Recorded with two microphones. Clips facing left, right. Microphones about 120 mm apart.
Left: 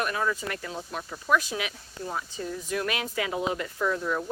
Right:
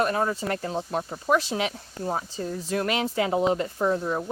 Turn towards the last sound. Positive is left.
turn(degrees=-30)  # may be behind; listen again after turning